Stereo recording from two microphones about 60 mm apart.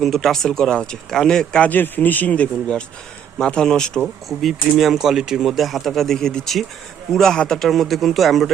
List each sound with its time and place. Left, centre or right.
0.0 s speech: centre
1.6 s speech: left; by 4.0 s centre
4.0 s speech: centre